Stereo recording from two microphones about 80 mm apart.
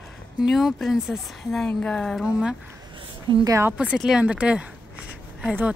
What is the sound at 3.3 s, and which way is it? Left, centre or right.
Speech, right.